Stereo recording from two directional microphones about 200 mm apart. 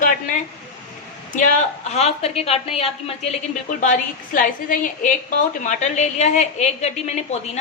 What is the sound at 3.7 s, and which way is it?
A woman's voice, 40° left (ahead or behind).